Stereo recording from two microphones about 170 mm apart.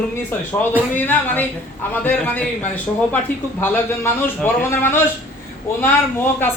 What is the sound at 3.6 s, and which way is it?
A man's voice, 10° left (ahead or behind).